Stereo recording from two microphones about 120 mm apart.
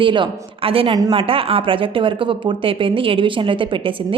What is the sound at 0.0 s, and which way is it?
A woman's voice, 45° right (ahead or behind).